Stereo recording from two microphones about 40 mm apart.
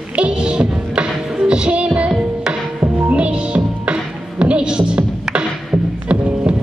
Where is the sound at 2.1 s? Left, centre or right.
Centre.